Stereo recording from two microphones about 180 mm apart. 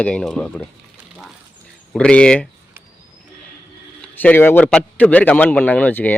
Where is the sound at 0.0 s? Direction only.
5° left (ahead or behind).